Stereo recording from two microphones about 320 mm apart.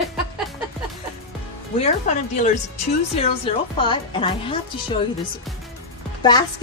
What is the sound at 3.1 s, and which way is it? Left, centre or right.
Speech, centre.